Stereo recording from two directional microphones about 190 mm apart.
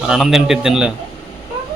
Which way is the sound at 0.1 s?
Centre (ahead or behind).